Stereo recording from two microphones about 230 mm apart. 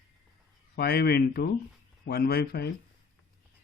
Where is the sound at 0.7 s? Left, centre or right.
Left.